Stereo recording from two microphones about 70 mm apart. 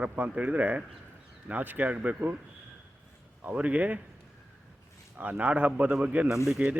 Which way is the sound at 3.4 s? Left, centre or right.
Right.